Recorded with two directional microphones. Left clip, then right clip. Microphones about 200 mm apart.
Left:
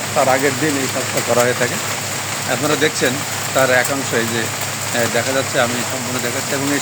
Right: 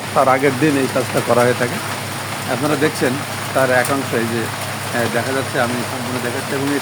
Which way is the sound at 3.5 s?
Centre (ahead or behind).